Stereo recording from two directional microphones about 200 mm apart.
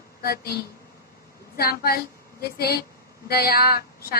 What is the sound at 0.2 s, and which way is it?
Speech, 50° left (ahead or behind).